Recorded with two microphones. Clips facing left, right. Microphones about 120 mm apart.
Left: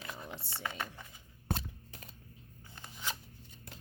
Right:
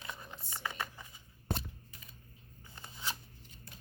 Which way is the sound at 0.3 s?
75° left (ahead or behind).